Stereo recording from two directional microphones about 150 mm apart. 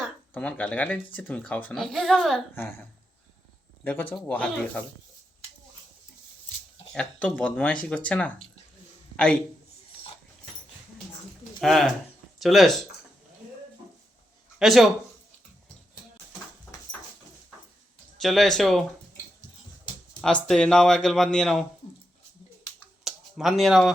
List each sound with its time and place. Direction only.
0.3 s a man's voice: 10° left (ahead or behind)
2.6 s speech: 15° left (ahead or behind)
3.8 s speech: 10° left (ahead or behind)
6.9 s speech: 10° left (ahead or behind)
11.6 s a man's voice: centre (ahead or behind)
14.6 s speech: centre (ahead or behind)
18.2 s a man's voice: centre (ahead or behind)
20.2 s a man's voice: 5° left (ahead or behind)
23.0 s a sound: centre (ahead or behind)